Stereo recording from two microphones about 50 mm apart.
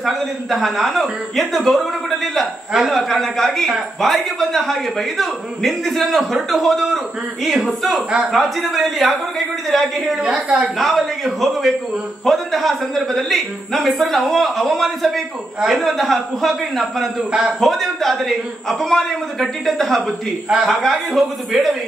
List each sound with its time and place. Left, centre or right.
0.0 s speech: centre
17.3 s a man's voice: centre
17.6 s speech: centre